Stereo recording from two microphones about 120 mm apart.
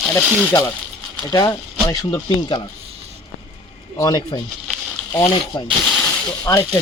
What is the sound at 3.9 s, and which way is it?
Speech, 30° left (ahead or behind).